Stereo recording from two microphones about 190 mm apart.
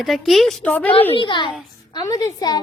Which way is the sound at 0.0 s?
Centre (ahead or behind).